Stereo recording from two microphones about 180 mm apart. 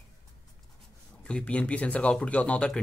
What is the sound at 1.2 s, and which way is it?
Speech, 5° left (ahead or behind).